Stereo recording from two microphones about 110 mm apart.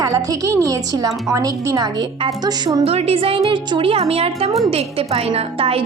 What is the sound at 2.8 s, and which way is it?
A woman's voice, 65° right (ahead or behind).